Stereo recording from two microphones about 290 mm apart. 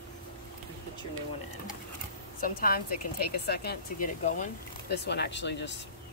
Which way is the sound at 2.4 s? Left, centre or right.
Left.